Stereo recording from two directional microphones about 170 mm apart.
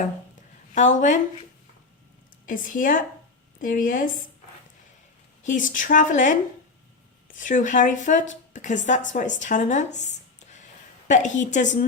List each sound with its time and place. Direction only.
0.7 s a woman's voice: 50° left (ahead or behind)
2.5 s a woman's voice: 50° left (ahead or behind)
5.4 s a woman's voice: 50° left (ahead or behind)